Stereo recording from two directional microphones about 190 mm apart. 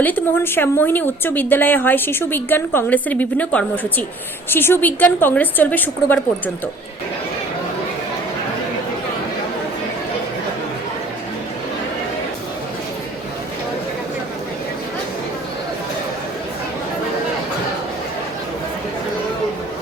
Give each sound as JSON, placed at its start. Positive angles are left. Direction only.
{"t": 0.0, "sound": "a woman's voice", "side_deg": 10}